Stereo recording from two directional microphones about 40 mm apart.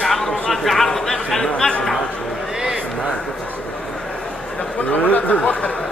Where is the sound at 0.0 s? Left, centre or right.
Centre.